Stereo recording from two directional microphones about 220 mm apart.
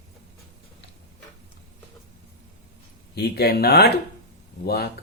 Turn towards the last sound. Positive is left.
turn(degrees=45)  # may be behind; listen again after turning